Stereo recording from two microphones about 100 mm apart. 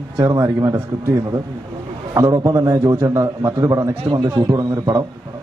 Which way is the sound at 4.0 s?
60° right (ahead or behind).